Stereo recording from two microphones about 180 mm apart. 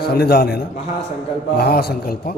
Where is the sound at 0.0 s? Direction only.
60° left (ahead or behind).